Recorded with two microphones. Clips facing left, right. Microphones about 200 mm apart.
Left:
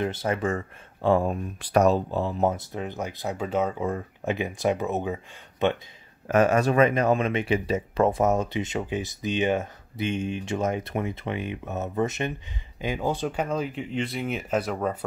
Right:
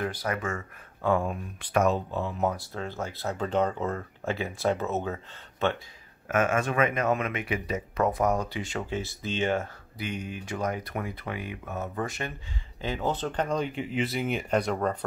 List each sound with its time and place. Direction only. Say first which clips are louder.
0.0 s speech: left 4 dB; 25° left (ahead or behind)
2.5 s speech: left 3 dB; 20° left (ahead or behind)
6.2 s speech: left 5 dB; 35° left (ahead or behind); by 15.0 s 5° left (ahead or behind)